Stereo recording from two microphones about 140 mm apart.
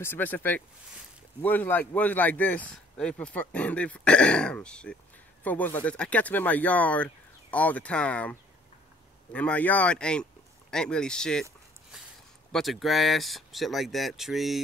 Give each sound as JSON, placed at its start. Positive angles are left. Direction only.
{"t": 0.0, "sound": "speech", "side_deg": 15}
{"t": 12.5, "sound": "speech", "side_deg": 0}